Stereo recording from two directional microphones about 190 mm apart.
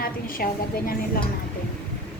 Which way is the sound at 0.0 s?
50° left (ahead or behind).